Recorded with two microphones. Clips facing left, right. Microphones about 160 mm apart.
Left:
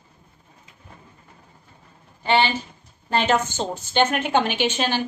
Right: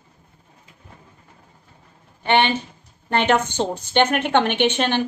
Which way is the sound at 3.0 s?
60° right (ahead or behind).